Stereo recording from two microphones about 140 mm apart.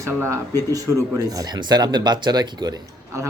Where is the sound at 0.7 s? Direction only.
25° right (ahead or behind).